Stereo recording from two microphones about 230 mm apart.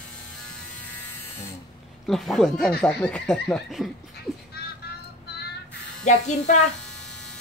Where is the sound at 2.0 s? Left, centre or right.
Centre.